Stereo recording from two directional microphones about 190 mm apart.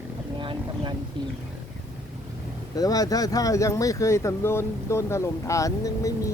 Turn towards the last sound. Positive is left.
turn(degrees=15)  # may be behind; listen again after turning